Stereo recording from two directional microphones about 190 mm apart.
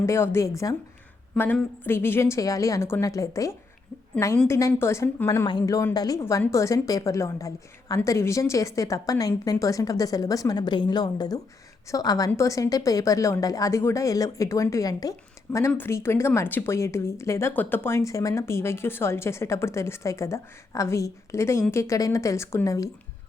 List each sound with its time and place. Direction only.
0.0 s speech: 15° left (ahead or behind)